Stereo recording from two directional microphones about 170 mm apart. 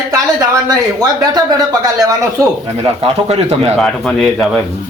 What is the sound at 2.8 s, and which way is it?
Speech, 35° right (ahead or behind).